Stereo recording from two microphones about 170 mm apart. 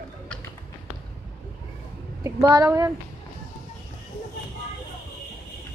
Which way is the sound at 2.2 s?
20° right (ahead or behind).